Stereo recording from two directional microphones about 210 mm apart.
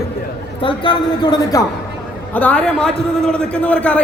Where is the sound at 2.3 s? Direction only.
5° left (ahead or behind).